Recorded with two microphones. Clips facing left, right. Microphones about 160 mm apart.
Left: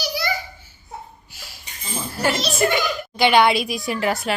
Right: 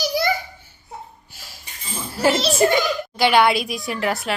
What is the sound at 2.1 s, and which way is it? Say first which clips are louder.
Speech: right 4 dB; 30° right (ahead or behind).